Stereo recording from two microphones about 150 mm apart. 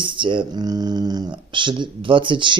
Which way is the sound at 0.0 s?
35° right (ahead or behind).